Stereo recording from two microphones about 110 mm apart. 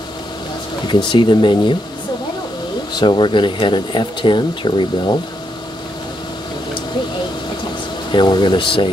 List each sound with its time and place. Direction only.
0.8 s speech: 45° left (ahead or behind)
2.9 s speech: 45° left (ahead or behind)
8.1 s speech: 45° left (ahead or behind)